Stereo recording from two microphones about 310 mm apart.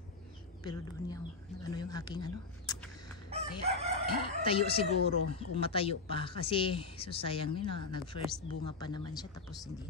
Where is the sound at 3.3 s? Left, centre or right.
Centre.